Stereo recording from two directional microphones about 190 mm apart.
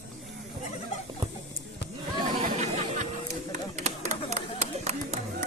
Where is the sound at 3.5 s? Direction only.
35° right (ahead or behind).